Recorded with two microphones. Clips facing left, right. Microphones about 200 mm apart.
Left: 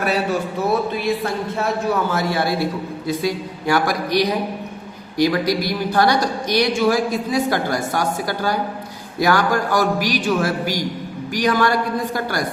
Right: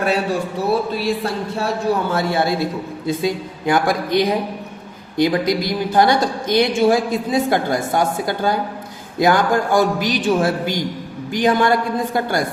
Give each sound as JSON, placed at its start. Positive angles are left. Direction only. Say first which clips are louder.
{"t": 0.0, "sound": "a woman's voice", "louder": "right 1 dB", "side_deg": -30}